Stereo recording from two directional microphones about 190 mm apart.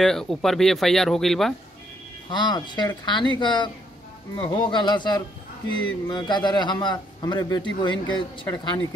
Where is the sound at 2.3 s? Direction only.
25° left (ahead or behind).